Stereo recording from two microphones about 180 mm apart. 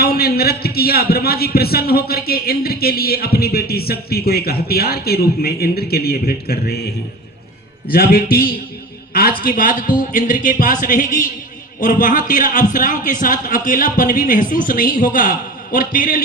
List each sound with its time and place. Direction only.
0.0 s a man's voice: 60° left (ahead or behind)
7.9 s a man's voice: 60° left (ahead or behind)